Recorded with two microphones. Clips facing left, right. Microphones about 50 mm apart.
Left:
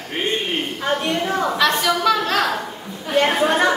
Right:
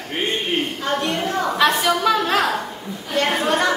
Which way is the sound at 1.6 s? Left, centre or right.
Centre.